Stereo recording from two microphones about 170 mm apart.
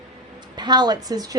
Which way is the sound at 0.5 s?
25° right (ahead or behind).